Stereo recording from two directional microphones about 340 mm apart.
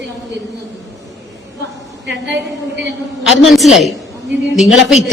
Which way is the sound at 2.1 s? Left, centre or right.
Right.